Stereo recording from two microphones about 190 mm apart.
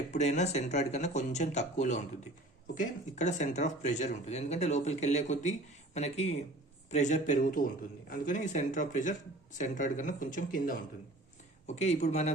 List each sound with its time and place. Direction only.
0.1 s speech: 35° left (ahead or behind)